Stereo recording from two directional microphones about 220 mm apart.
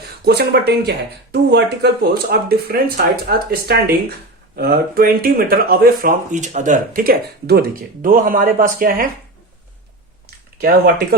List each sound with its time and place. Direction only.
0.3 s speech: 45° right (ahead or behind)
10.6 s speech: 40° right (ahead or behind)